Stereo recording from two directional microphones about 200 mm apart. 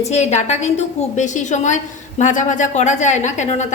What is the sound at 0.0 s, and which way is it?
A woman's voice, 35° left (ahead or behind).